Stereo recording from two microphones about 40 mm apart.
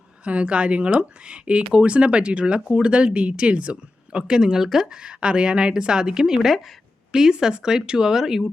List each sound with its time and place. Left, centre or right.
0.3 s speech: right; by 5.0 s centre
5.0 s speech: right; by 8.4 s centre